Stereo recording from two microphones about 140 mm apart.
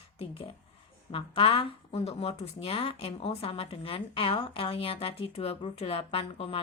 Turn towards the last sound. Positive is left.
turn(degrees=40)  # may be behind; listen again after turning